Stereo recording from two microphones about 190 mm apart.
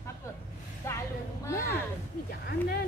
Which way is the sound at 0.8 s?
15° left (ahead or behind).